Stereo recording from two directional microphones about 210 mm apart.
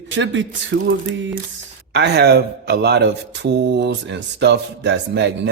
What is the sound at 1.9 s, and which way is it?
Speech, 50° right (ahead or behind).